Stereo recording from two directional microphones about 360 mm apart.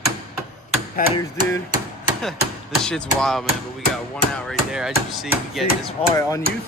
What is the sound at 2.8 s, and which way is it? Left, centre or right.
A man's voice, centre.